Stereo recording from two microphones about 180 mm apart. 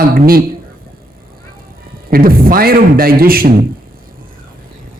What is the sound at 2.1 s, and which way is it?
Speech, 55° right (ahead or behind).